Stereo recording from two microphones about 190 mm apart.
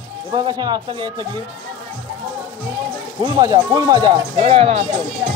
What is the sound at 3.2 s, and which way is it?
Speech, 20° right (ahead or behind).